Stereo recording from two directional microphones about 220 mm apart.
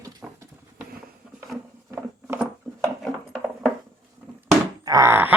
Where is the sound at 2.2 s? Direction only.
5° right (ahead or behind).